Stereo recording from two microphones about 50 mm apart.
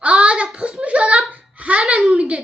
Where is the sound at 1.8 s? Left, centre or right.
Centre.